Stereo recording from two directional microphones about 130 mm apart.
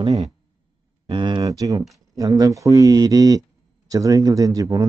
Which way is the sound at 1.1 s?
40° right (ahead or behind).